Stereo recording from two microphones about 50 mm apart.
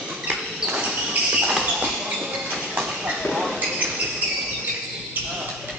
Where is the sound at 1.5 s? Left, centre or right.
Centre.